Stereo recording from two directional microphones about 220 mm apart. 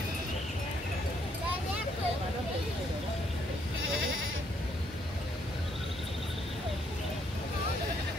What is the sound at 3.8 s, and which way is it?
Sheep, 65° right (ahead or behind).